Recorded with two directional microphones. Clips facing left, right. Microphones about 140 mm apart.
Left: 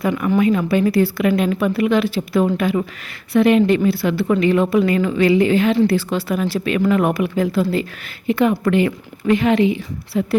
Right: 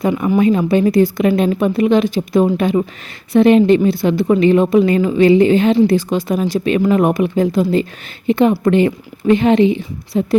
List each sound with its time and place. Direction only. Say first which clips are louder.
0.0 s a woman's voice: right 3 dB; 25° right (ahead or behind)